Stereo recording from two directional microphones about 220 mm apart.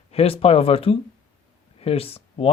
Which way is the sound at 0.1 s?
25° left (ahead or behind).